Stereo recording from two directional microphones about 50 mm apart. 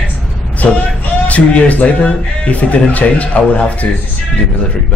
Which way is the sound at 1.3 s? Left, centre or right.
Left.